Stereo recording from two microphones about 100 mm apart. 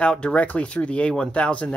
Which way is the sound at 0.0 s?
10° left (ahead or behind).